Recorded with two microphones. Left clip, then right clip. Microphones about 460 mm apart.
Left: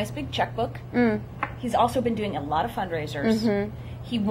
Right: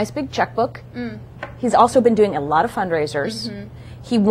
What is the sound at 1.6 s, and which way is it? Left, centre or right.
A woman's voice, right.